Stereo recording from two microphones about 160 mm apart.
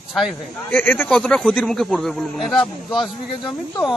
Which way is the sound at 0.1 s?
Centre (ahead or behind).